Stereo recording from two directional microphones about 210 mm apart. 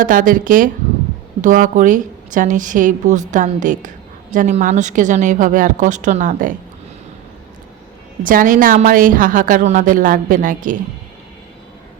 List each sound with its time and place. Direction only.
0.0 s a woman's voice: 40° right (ahead or behind)
8.2 s a woman's voice: 40° right (ahead or behind)